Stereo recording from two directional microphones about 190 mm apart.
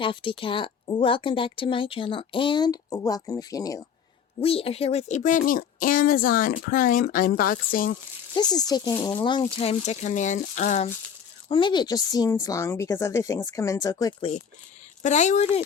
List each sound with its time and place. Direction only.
0.0 s speech: 25° left (ahead or behind)
4.4 s speech: 30° left (ahead or behind); by 7.9 s 50° left (ahead or behind)
8.3 s speech: 20° left (ahead or behind); by 10.9 s 40° left (ahead or behind)
11.4 s speech: 25° left (ahead or behind)
15.0 s speech: 40° left (ahead or behind)